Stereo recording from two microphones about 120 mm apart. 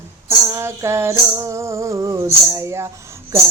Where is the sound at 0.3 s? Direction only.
20° right (ahead or behind).